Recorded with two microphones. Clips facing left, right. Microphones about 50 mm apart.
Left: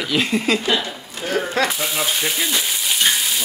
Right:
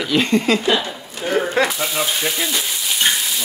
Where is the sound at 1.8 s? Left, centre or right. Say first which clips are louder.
Right 1 dB; centre.